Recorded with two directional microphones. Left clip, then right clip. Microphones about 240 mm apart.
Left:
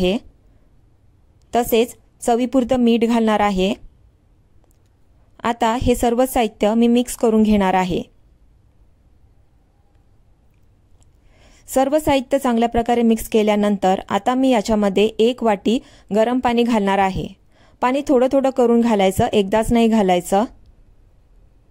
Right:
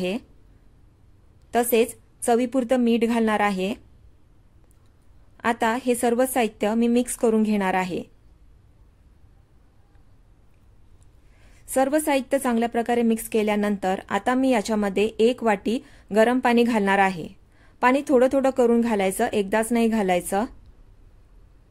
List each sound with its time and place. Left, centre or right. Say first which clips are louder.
0.0 s a woman's voice: left 8 dB; left
1.5 s a woman's voice: left 3 dB; left
5.4 s a woman's voice: left 4 dB; left
11.3 s a woman's voice: left 4 dB; left